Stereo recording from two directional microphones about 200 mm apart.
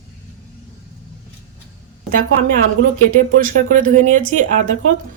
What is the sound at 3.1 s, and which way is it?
A woman's voice, 45° right (ahead or behind).